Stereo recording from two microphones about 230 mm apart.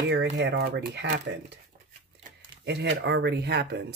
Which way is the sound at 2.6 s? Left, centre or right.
Right.